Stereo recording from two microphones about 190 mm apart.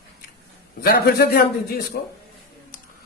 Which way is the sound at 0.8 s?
55° left (ahead or behind).